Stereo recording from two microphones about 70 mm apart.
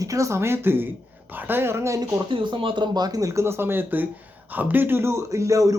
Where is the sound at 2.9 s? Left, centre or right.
Right.